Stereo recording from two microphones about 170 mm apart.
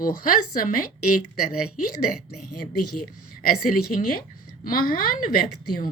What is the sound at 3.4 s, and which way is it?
Speech, 60° left (ahead or behind).